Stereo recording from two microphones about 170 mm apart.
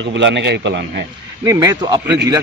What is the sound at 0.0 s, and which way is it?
A man's voice, 90° right.